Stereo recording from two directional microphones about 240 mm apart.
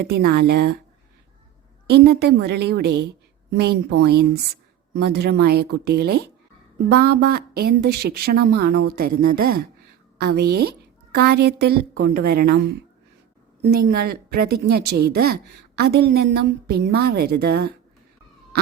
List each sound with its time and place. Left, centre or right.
0.2 s a woman's voice: right
1.9 s a woman's voice: right